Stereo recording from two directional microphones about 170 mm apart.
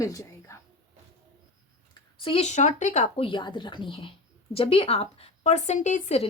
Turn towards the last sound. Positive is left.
turn(degrees=40)  # may be behind; listen again after turning